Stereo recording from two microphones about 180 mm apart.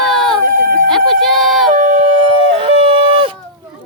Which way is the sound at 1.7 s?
45° right (ahead or behind).